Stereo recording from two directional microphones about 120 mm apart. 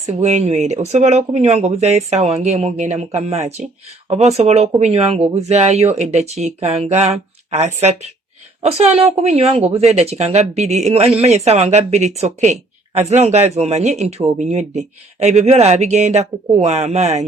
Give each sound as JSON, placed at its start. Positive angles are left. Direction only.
{"t": 0.0, "sound": "speech", "side_deg": -65}